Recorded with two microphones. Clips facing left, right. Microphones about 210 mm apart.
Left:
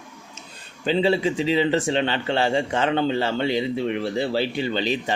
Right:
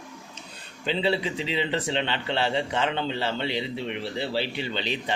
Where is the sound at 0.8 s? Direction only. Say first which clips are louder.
Left 6 dB; 45° left (ahead or behind).